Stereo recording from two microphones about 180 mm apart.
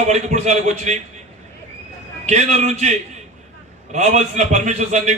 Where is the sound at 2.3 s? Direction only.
40° right (ahead or behind).